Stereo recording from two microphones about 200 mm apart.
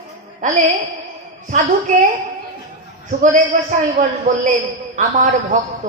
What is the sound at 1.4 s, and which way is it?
Speech, 35° right (ahead or behind).